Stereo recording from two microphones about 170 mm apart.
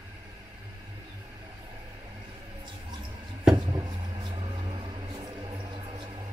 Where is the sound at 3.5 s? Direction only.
25° right (ahead or behind).